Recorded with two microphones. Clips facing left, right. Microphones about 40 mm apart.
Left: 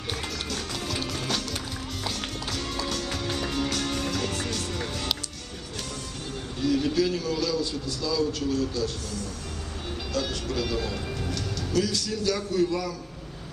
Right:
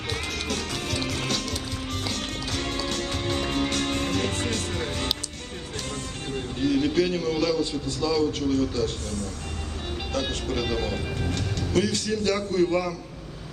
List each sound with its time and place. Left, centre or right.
0.1 s music: right
6.3 s a man's voice: right